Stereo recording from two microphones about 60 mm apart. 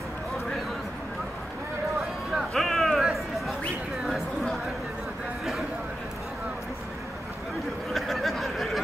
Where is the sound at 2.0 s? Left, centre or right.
Centre.